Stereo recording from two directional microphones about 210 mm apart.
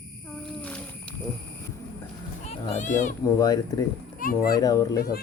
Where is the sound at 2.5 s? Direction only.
35° left (ahead or behind).